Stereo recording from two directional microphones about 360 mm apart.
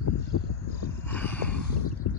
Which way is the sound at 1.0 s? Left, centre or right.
Centre.